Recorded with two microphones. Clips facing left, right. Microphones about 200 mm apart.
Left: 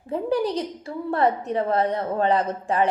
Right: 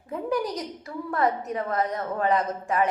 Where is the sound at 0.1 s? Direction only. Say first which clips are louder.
Left 4 dB; 30° left (ahead or behind).